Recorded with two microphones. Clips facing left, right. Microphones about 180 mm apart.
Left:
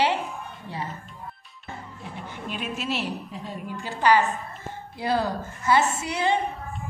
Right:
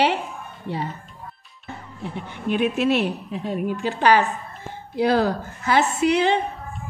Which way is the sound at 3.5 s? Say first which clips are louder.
Right 11 dB; 70° right (ahead or behind).